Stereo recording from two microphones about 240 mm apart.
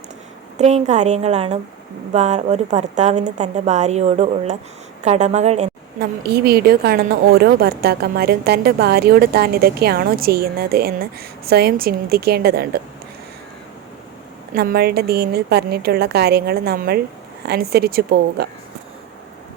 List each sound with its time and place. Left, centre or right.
0.6 s a woman's voice: right
6.0 s a woman's voice: right
14.5 s a woman's voice: right